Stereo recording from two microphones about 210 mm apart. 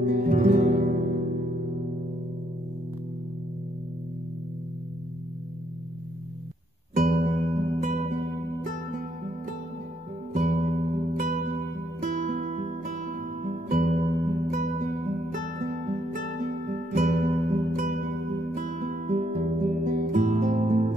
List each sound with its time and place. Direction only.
0.0 s music: 40° right (ahead or behind)
7.0 s music: 40° right (ahead or behind)
10.3 s music: 40° right (ahead or behind)
12.0 s music: 40° right (ahead or behind)